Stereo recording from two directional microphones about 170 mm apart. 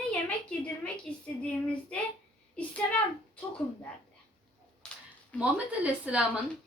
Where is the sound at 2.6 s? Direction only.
5° left (ahead or behind).